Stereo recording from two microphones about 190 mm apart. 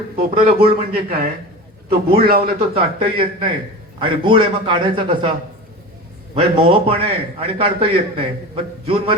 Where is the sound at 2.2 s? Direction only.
50° right (ahead or behind).